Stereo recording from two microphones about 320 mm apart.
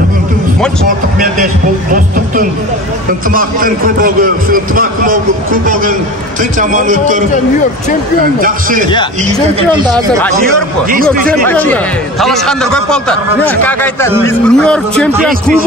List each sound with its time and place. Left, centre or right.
0.8 s a man's voice: right
8.4 s a man's voice: right
9.8 s speech: centre
10.9 s a man's voice: right
11.4 s a man's voice: centre